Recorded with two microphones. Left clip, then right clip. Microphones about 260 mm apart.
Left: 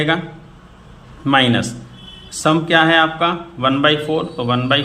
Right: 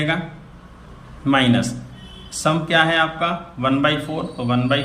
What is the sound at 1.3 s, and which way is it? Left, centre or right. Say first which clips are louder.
Speech: left 3 dB; centre.